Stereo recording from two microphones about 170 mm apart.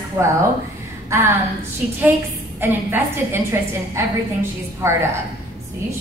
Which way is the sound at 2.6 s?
10° right (ahead or behind).